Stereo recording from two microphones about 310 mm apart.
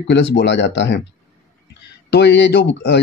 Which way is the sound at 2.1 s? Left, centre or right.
Left.